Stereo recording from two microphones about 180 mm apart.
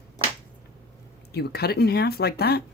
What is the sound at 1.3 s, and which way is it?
Speech, 65° left (ahead or behind).